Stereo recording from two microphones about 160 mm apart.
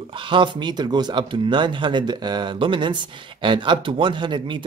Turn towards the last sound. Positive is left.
turn(degrees=-30)  # may be behind; listen again after turning